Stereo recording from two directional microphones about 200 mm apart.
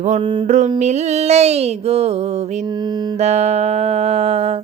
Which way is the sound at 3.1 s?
35° right (ahead or behind).